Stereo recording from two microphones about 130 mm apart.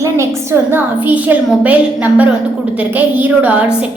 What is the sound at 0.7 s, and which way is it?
A woman's voice, 15° right (ahead or behind).